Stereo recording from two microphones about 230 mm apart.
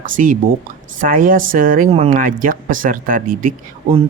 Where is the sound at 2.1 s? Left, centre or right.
Right.